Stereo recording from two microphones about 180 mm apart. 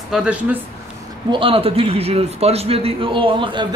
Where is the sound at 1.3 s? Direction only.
30° right (ahead or behind).